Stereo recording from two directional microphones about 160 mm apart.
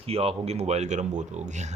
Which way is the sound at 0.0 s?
35° right (ahead or behind).